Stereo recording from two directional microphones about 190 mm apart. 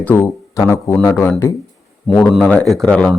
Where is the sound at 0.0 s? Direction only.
15° left (ahead or behind).